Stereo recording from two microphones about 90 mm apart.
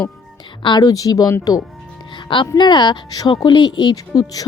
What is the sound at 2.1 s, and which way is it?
Music, 65° left (ahead or behind).